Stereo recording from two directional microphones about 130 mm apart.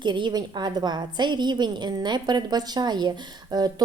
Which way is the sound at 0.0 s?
35° right (ahead or behind).